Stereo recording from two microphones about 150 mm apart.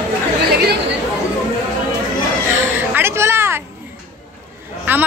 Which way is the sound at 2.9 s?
15° right (ahead or behind).